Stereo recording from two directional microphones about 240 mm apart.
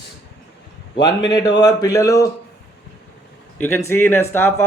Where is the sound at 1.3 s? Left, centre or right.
Centre.